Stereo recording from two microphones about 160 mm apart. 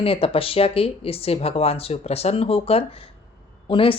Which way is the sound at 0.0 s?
35° left (ahead or behind).